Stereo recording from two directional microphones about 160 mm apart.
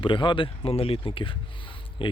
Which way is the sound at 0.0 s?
30° left (ahead or behind).